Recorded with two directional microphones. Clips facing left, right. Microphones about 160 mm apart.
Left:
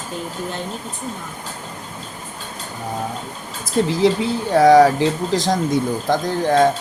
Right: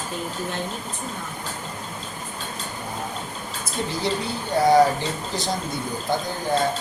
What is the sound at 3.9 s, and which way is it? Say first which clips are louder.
Speech: left 8 dB; 90° left.